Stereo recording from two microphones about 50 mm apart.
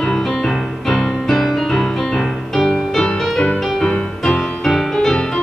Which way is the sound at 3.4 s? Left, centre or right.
Left.